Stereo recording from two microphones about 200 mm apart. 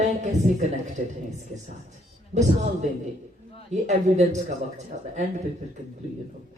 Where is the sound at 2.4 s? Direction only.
35° right (ahead or behind).